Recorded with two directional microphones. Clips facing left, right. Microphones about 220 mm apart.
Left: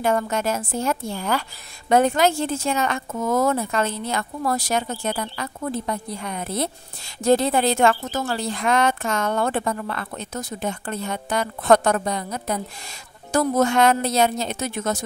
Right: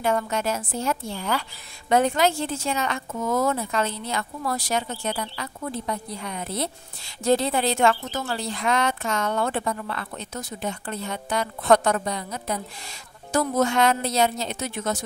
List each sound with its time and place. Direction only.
0.0 s a woman's voice: 50° left (ahead or behind)